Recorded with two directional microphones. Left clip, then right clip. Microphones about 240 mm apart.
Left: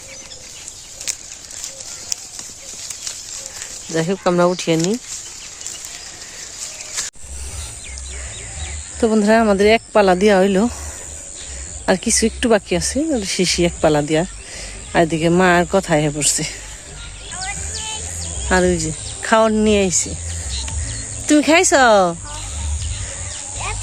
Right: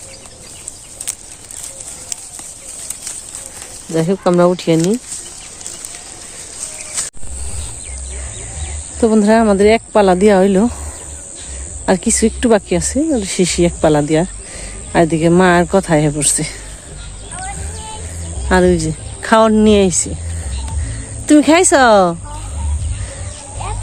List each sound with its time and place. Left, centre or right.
3.9 s speech: centre
7.0 s a sound: right
9.0 s speech: centre
11.9 s speech: centre
18.4 s speech: centre